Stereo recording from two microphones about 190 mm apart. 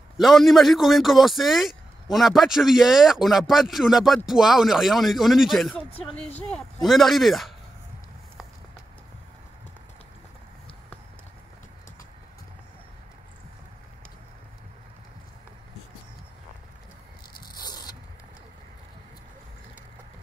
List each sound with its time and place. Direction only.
0.2 s speech: centre (ahead or behind)
17.6 s zipper: 20° left (ahead or behind)